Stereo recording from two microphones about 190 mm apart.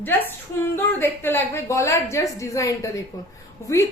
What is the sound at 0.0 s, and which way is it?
A woman's voice, 10° left (ahead or behind).